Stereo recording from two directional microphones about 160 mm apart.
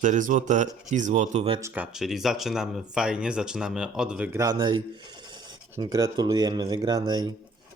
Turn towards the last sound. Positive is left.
turn(degrees=-25)  # may be behind; listen again after turning